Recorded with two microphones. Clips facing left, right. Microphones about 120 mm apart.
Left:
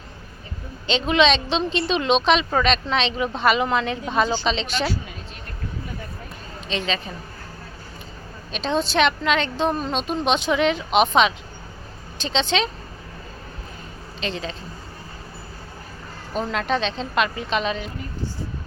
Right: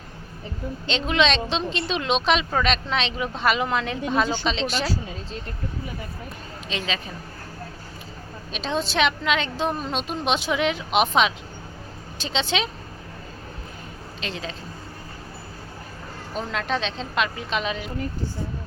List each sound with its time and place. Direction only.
0.9 s a woman's voice: centre (ahead or behind)
4.9 s a sound: 30° right (ahead or behind)
6.7 s a woman's voice: 5° right (ahead or behind)
8.5 s a woman's voice: centre (ahead or behind)
14.2 s a woman's voice: 5° right (ahead or behind)
16.3 s a woman's voice: centre (ahead or behind)